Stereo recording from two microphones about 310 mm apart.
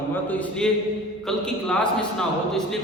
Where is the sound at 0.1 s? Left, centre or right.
Centre.